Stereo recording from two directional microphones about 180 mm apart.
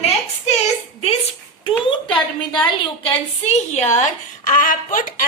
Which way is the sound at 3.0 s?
40° left (ahead or behind).